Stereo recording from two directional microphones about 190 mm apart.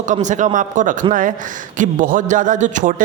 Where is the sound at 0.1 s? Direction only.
40° right (ahead or behind).